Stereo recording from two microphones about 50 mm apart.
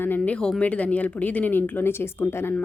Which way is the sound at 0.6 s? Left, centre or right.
Left.